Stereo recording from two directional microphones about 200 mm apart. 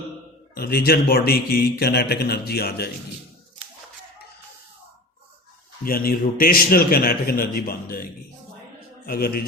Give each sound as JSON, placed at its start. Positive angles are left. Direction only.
{"t": 0.5, "sound": "a man's voice", "side_deg": 50}
{"t": 5.8, "sound": "a man's voice", "side_deg": 45}
{"t": 9.0, "sound": "a man's voice", "side_deg": 50}